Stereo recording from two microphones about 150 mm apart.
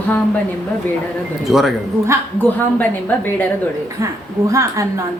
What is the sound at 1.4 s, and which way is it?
Speech, centre (ahead or behind).